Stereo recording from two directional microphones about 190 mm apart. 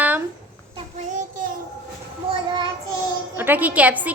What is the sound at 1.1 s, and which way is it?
Child singing, 40° right (ahead or behind).